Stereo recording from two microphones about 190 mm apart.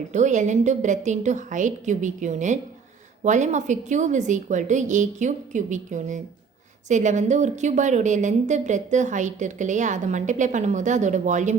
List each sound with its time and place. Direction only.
0.1 s a woman's voice: 40° right (ahead or behind)